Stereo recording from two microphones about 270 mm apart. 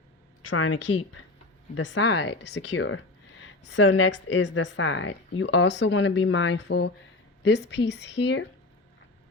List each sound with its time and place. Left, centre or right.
0.5 s speech: left